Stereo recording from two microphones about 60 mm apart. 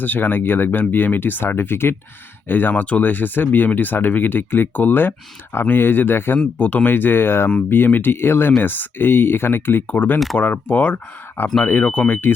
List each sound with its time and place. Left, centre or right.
0.0 s speech: left
6.6 s speech: left
10.2 s speech: centre
10.4 s speech: left